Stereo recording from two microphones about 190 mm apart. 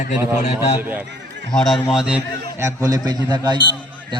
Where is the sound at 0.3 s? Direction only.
40° left (ahead or behind).